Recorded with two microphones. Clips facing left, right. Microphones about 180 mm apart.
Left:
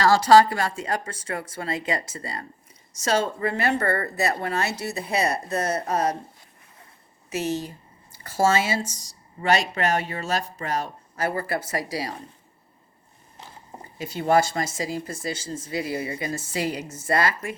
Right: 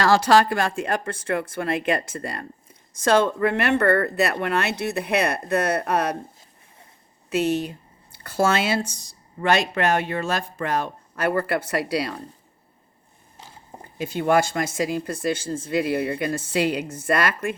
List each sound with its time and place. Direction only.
0.0 s speech: 60° right (ahead or behind)
7.3 s speech: 60° right (ahead or behind)
14.0 s speech: 55° right (ahead or behind)